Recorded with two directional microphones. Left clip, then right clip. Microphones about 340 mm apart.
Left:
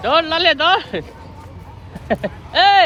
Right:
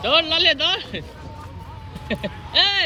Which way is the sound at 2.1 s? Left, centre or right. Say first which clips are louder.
Left 4 dB; centre.